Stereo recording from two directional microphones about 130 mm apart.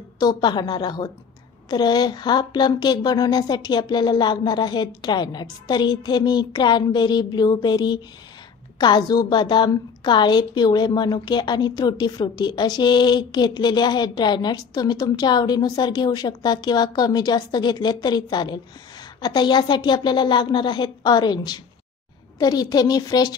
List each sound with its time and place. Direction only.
0.2 s a woman's voice: 30° left (ahead or behind)